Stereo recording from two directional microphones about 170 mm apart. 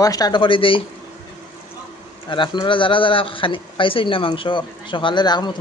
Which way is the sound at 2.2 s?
30° left (ahead or behind).